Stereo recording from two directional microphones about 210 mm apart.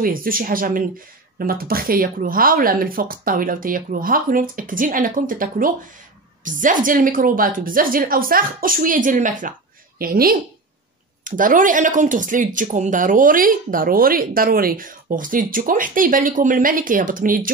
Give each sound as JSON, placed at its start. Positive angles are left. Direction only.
{"t": 0.0, "sound": "speech", "side_deg": -45}